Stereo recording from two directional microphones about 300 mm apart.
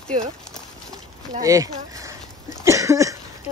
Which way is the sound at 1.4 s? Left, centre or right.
Centre.